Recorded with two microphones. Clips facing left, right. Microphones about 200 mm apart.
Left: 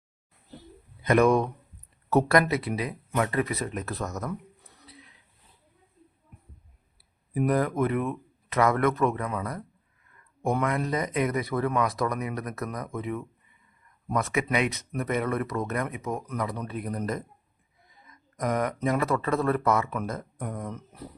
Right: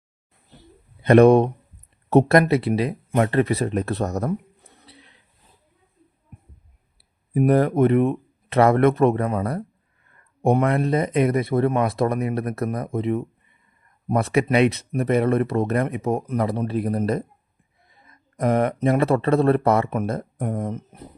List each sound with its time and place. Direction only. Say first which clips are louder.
1.0 s speech: right 8 dB; 30° right (ahead or behind)
4.8 s a sound: right 1 dB; 30° right (ahead or behind)
7.3 s speech: right 7 dB; 30° right (ahead or behind)
10.8 s speech: right 7 dB; 30° right (ahead or behind)
18.3 s speech: right 7 dB; 30° right (ahead or behind)
20.5 s speech: right 9 dB; 40° right (ahead or behind)